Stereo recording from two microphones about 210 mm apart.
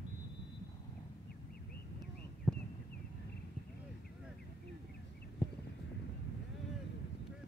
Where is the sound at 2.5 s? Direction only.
Centre (ahead or behind).